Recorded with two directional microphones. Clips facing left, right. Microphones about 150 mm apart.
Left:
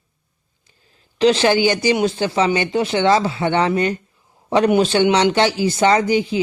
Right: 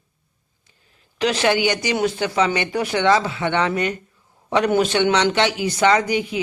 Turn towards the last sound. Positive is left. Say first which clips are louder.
# left 3 dB
turn(degrees=30)  # may be behind; listen again after turning